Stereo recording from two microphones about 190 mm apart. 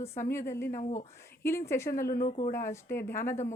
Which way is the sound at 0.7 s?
40° left (ahead or behind).